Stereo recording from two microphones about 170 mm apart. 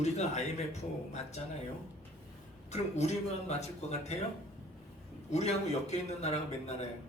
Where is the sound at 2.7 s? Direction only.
40° left (ahead or behind).